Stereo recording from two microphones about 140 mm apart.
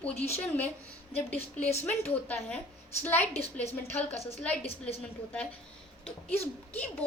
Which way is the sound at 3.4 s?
50° left (ahead or behind).